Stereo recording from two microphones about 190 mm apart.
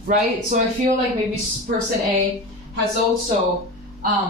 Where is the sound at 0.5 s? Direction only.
40° right (ahead or behind).